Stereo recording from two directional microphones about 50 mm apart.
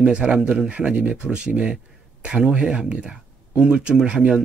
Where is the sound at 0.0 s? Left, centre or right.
Right.